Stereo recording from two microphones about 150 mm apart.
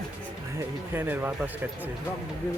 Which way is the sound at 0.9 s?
10° right (ahead or behind).